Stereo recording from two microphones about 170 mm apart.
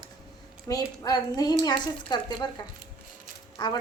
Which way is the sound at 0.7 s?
25° left (ahead or behind).